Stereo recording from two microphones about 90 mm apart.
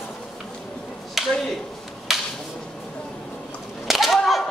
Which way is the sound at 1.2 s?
Centre (ahead or behind).